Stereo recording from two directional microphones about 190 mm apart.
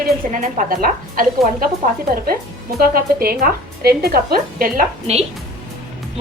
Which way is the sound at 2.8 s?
50° right (ahead or behind).